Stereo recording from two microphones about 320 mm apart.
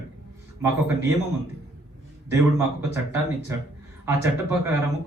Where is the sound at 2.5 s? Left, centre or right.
Centre.